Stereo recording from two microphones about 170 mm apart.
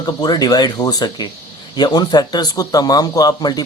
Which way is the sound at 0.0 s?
25° left (ahead or behind).